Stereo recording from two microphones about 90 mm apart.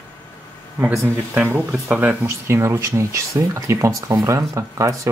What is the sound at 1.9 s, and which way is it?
Speech, 20° right (ahead or behind).